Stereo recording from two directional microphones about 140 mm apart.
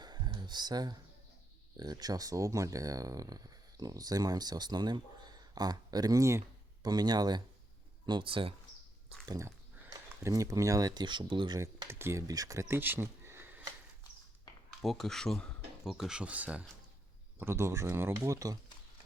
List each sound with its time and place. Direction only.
0.0 s a sound: 30° right (ahead or behind)
1.7 s speech: 30° right (ahead or behind)
9.2 s speech: 25° right (ahead or behind)
14.8 s speech: centre (ahead or behind); by 18.6 s 25° right (ahead or behind)